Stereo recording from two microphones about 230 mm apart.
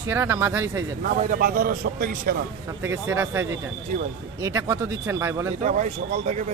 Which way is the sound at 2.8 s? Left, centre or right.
Centre.